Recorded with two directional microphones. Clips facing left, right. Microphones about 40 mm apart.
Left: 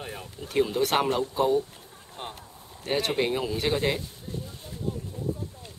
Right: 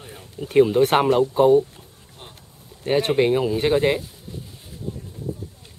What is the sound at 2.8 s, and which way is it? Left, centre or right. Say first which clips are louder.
Speech: right 7 dB; centre.